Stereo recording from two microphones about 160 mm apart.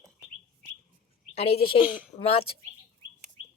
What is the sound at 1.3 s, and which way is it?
Speech, 40° left (ahead or behind).